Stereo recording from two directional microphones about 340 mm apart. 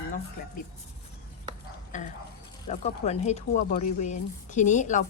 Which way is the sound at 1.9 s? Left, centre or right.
Left.